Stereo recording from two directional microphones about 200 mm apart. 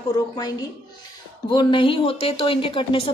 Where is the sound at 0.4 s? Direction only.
20° left (ahead or behind).